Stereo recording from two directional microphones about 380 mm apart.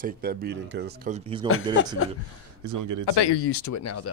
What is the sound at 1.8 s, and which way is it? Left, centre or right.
Speech, left.